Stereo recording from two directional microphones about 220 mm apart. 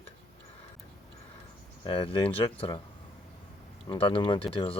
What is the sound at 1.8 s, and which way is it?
Speech, 25° left (ahead or behind).